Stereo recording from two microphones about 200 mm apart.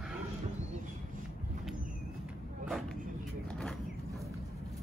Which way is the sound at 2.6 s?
Centre (ahead or behind).